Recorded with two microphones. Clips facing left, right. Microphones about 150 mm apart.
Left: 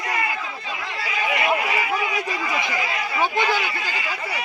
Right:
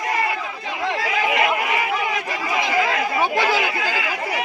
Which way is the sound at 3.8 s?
90° right.